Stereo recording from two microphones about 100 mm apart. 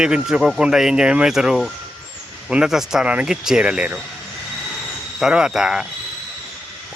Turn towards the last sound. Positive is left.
turn(degrees=-5)  # may be behind; listen again after turning